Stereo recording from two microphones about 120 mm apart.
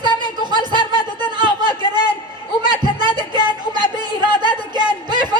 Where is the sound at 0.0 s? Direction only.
40° right (ahead or behind).